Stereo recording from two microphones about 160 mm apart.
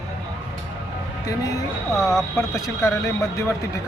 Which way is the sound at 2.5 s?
20° left (ahead or behind).